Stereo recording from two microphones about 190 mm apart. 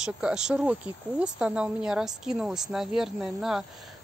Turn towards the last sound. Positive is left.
turn(degrees=0)  # may be behind; listen again after turning